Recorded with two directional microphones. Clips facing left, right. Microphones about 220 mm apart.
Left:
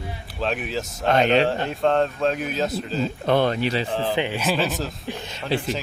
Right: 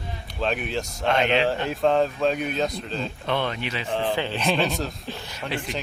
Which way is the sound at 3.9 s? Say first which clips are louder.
Left 1 dB; 5° left (ahead or behind).